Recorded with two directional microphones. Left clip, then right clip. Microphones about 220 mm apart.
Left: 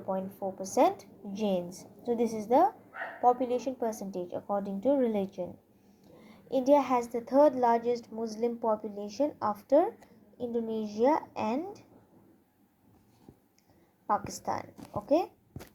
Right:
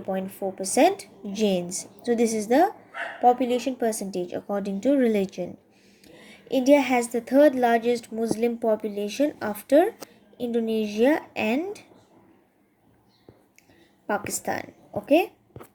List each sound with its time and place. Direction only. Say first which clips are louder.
0.1 s a woman's voice: right 5 dB; 40° right (ahead or behind)
14.4 s a woman's voice: right 5 dB; 35° right (ahead or behind)